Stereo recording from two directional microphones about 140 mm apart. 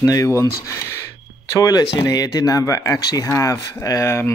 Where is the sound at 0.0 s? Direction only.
25° left (ahead or behind).